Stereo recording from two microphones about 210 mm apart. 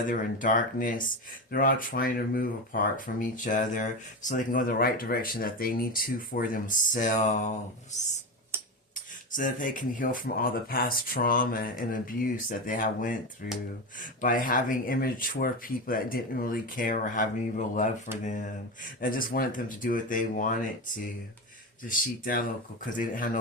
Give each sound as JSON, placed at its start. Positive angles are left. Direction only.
{"t": 0.1, "sound": "speech", "side_deg": 40}
{"t": 8.5, "sound": "tick-tock", "side_deg": -10}
{"t": 9.3, "sound": "speech", "side_deg": 40}